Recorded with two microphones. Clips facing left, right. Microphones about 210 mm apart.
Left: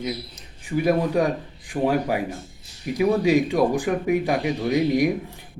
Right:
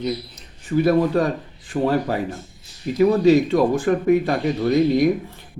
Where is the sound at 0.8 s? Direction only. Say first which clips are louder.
Right 3 dB; 15° left (ahead or behind).